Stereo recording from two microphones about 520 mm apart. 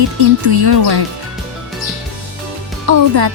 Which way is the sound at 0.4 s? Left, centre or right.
Right.